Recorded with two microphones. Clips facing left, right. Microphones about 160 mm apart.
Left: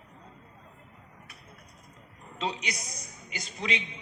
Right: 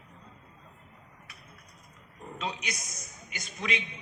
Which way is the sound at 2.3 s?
30° left (ahead or behind).